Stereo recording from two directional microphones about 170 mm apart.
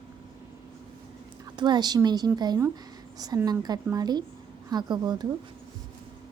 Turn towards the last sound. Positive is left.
turn(degrees=-25)  # may be behind; listen again after turning